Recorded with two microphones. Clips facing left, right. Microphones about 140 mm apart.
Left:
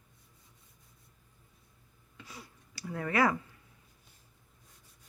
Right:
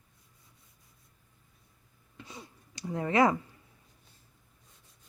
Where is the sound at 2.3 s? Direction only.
25° right (ahead or behind).